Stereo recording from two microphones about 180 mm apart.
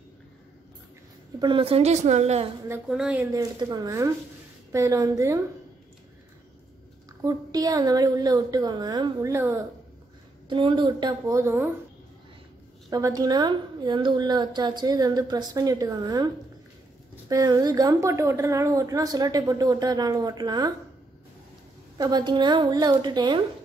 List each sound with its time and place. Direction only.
1.4 s a woman's voice: 30° right (ahead or behind)
2.9 s speech: 5° right (ahead or behind)
3.3 s speech: 20° right (ahead or behind)
7.2 s a woman's voice: 20° right (ahead or behind)
10.5 s a woman's voice: 25° right (ahead or behind)
12.9 s a woman's voice: 20° right (ahead or behind)
17.3 s a woman's voice: 20° right (ahead or behind)
21.9 s a woman's voice: 20° right (ahead or behind)